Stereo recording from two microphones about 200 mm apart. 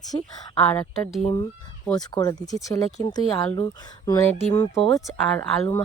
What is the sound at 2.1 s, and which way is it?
Speech, 20° left (ahead or behind).